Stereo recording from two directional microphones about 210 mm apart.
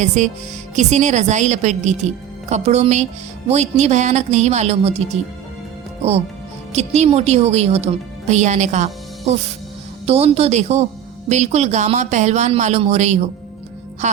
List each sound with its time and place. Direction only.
0.0 s a woman's voice: 35° right (ahead or behind)